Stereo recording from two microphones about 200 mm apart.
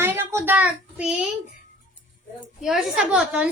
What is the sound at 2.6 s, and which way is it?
Speech, centre (ahead or behind).